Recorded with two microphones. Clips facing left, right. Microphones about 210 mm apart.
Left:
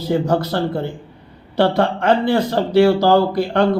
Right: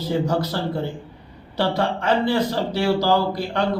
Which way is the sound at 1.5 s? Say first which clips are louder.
Left 6 dB; 55° left (ahead or behind).